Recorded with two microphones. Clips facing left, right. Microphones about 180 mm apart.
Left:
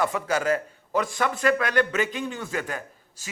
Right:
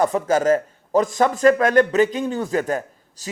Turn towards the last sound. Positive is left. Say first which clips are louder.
# right 6 dB
turn(degrees=-40)  # may be behind; listen again after turning